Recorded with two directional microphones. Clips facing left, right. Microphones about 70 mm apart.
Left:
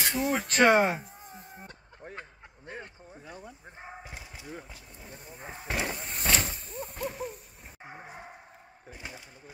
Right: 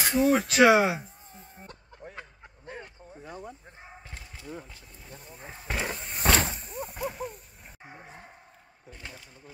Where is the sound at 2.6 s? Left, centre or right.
Centre.